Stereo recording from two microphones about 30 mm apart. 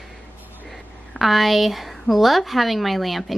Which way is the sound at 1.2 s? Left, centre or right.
Centre.